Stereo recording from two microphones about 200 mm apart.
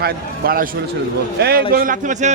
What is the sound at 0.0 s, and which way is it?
A man's voice, 45° right (ahead or behind).